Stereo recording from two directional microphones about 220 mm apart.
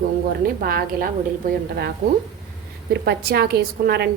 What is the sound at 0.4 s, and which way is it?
Speech, 40° right (ahead or behind).